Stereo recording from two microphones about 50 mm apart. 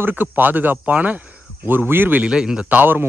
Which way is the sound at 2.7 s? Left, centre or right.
Right.